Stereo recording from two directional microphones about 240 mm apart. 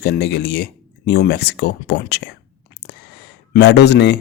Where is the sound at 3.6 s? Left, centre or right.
Left.